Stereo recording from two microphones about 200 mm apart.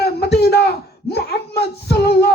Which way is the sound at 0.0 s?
55° left (ahead or behind).